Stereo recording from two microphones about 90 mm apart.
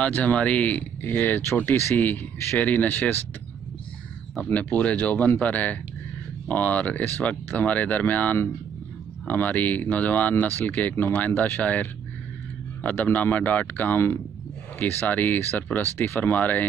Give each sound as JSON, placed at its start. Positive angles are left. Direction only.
{"t": 0.0, "sound": "speech", "side_deg": 15}
{"t": 1.1, "sound": "speech", "side_deg": 25}
{"t": 4.4, "sound": "speech", "side_deg": 20}